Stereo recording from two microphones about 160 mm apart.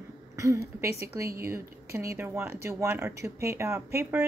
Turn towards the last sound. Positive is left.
turn(degrees=-15)  # may be behind; listen again after turning